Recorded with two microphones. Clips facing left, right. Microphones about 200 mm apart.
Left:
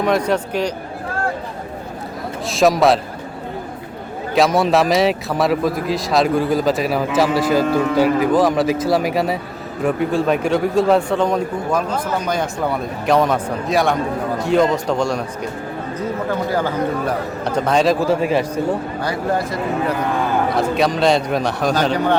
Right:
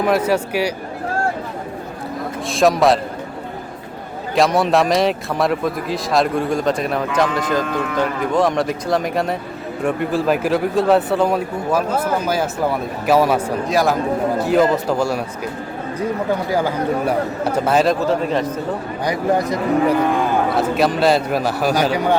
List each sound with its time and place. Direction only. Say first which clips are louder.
0.0 s a man's voice: right 1 dB; 5° right (ahead or behind)
2.5 s speech: even; centre (ahead or behind)
4.4 s speech: even; centre (ahead or behind)
16.5 s a man's voice: right 1 dB; 10° right (ahead or behind)
18.0 s a man's voice: left 1 dB; 10° left (ahead or behind)
19.0 s a man's voice: right 4 dB; 15° right (ahead or behind)
20.5 s speech: even; centre (ahead or behind)